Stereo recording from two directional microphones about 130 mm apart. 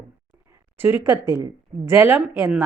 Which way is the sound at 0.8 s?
15° right (ahead or behind).